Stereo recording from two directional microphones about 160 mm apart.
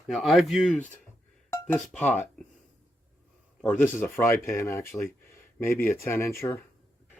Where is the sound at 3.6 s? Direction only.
10° left (ahead or behind).